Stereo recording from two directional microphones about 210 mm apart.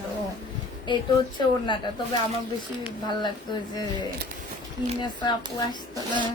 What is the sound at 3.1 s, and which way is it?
Speech, 20° left (ahead or behind).